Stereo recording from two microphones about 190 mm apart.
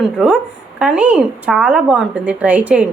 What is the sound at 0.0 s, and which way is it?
A woman's voice, centre (ahead or behind).